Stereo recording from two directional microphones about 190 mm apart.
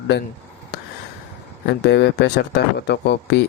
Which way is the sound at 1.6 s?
65° left (ahead or behind).